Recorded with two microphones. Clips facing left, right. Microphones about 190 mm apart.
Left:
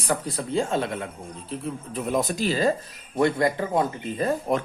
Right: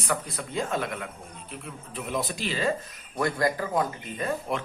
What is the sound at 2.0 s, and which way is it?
Speech, 45° left (ahead or behind).